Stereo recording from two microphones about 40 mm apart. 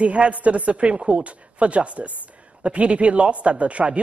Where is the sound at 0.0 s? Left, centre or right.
Right.